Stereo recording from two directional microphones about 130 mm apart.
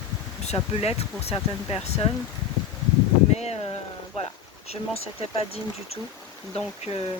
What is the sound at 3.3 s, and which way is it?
Speech, 55° left (ahead or behind).